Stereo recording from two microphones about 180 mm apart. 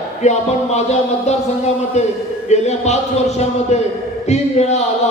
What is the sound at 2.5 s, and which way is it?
A man's voice, 40° left (ahead or behind).